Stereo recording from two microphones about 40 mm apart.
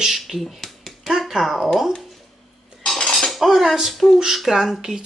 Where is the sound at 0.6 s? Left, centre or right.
Centre.